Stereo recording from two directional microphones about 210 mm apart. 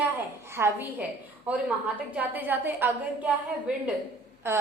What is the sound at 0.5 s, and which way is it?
A woman's voice, 10° right (ahead or behind).